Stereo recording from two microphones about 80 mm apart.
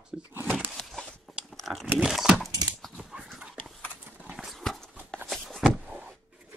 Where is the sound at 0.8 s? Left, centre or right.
Centre.